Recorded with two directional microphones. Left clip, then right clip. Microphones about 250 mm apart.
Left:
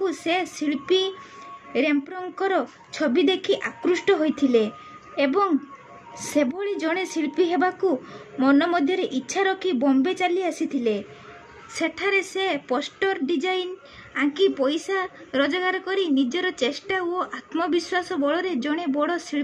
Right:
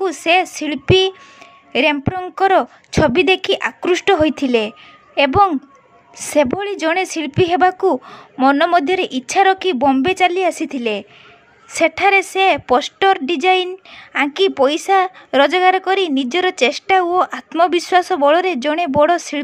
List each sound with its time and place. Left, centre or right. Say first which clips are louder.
0.0 s a woman's voice: right 9 dB; right